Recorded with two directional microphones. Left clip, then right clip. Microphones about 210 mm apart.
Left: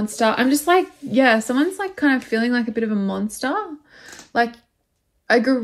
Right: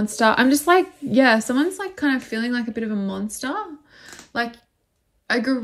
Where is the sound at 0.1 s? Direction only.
20° right (ahead or behind).